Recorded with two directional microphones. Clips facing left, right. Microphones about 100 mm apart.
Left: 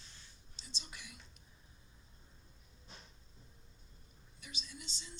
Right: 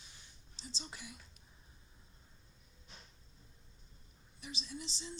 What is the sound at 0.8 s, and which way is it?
Speech, 30° right (ahead or behind).